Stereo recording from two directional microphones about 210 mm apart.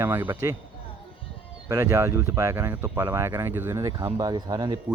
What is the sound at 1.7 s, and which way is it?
Speech, 15° right (ahead or behind).